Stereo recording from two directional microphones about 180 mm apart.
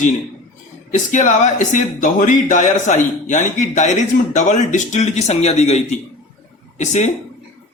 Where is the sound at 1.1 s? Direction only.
45° left (ahead or behind).